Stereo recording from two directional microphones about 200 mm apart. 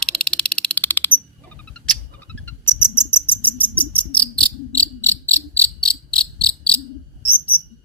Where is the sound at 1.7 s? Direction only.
5° left (ahead or behind).